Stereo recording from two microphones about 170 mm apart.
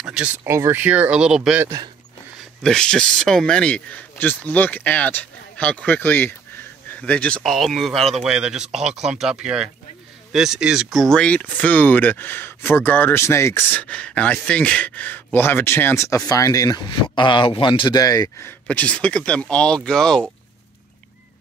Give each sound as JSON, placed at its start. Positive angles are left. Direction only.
{"t": 0.0, "sound": "a sound", "side_deg": -5}
{"t": 0.4, "sound": "speech", "side_deg": -15}
{"t": 18.7, "sound": "speech", "side_deg": 5}